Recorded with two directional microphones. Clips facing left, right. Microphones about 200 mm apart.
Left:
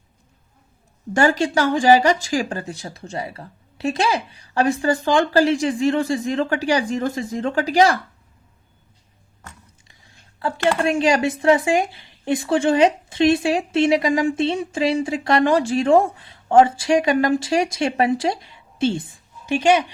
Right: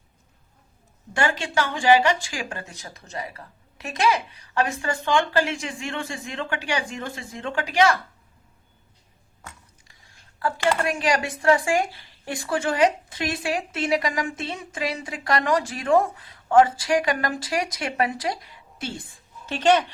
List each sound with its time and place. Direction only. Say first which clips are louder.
1.1 s speech: left 7 dB; 40° left (ahead or behind)
10.4 s speech: left 4 dB; 25° left (ahead or behind)
19.5 s speech: left 3 dB; 10° left (ahead or behind)